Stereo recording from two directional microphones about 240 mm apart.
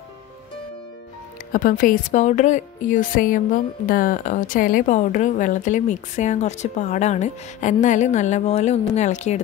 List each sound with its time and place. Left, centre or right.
1.5 s a woman's voice: left